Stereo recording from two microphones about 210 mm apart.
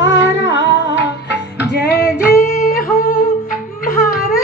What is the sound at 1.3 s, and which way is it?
Music, 55° left (ahead or behind).